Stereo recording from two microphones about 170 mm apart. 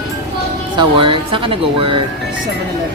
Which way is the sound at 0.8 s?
30° right (ahead or behind).